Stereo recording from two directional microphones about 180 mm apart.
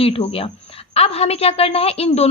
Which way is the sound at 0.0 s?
30° left (ahead or behind).